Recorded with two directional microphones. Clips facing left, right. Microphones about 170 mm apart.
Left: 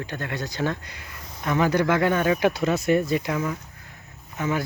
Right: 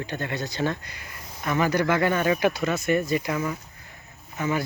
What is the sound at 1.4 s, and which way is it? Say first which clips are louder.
Speech: left 2 dB; 5° right (ahead or behind).